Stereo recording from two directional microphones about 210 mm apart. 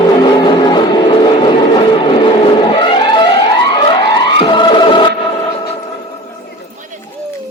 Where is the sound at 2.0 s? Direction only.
25° left (ahead or behind).